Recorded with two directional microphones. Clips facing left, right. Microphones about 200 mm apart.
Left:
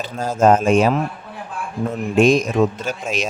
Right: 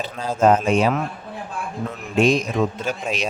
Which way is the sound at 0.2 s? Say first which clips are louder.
Left 2 dB; 45° left (ahead or behind).